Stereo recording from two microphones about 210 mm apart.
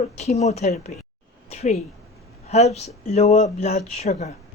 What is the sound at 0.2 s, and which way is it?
Speech, 30° left (ahead or behind).